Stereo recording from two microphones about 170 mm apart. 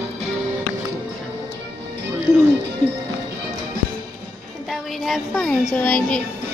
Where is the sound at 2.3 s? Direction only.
15° left (ahead or behind).